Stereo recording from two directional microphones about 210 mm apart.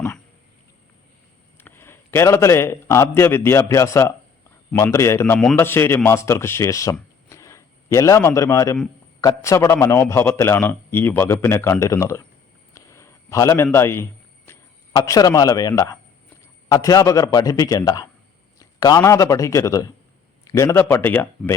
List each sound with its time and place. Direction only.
1.5 s a man's voice: 10° left (ahead or behind)
12.7 s a sound: 15° left (ahead or behind)
16.6 s a man's voice: 15° left (ahead or behind)